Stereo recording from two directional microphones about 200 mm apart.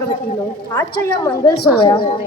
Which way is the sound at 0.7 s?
20° left (ahead or behind).